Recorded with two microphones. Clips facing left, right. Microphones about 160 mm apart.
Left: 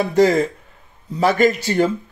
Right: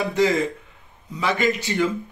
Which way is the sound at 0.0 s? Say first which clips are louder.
Left 5 dB; 40° left (ahead or behind).